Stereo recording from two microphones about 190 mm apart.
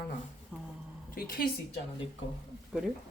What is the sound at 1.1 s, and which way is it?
Speech, 50° left (ahead or behind).